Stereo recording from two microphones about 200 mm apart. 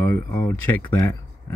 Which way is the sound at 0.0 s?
10° left (ahead or behind).